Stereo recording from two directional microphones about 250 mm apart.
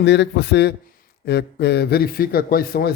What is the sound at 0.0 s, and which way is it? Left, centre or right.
A man's voice, left.